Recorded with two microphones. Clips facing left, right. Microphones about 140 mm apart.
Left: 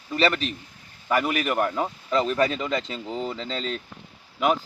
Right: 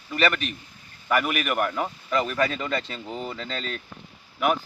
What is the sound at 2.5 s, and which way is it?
Speech, 15° left (ahead or behind).